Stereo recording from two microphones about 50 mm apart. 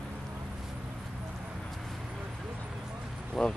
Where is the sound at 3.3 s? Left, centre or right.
Centre.